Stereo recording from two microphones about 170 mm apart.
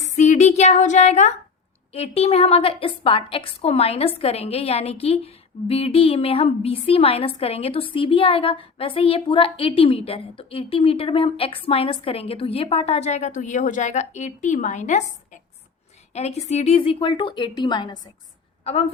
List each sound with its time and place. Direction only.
0.0 s a sound: 45° left (ahead or behind)
1.9 s a woman's voice: 35° left (ahead or behind)
18.6 s a woman's voice: 40° left (ahead or behind)